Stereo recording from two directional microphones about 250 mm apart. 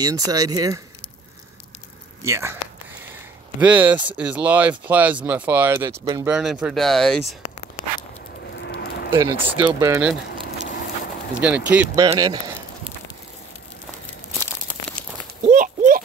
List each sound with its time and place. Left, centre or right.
0.0 s speech: centre
2.2 s speech: centre
3.6 s speech: centre
6.3 s speech: centre
8.5 s a sound: left
9.1 s speech: centre
11.4 s speech: centre
15.5 s clip-clop: right